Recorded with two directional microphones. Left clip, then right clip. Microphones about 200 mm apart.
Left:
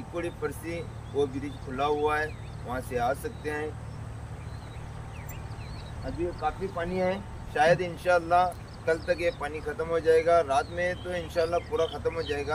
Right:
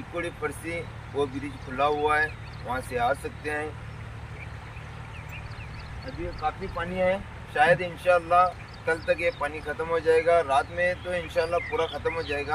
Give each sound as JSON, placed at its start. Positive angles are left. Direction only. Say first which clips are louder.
{"t": 0.1, "sound": "speech", "louder": "right 2 dB", "side_deg": 10}
{"t": 6.0, "sound": "speech", "louder": "even", "side_deg": 10}
{"t": 10.3, "sound": "speech", "louder": "right 1 dB", "side_deg": 5}